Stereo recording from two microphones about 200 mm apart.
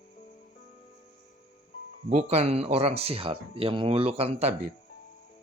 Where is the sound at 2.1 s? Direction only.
35° right (ahead or behind).